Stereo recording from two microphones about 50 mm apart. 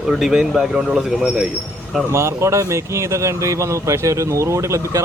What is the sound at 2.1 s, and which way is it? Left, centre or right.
Speech, right.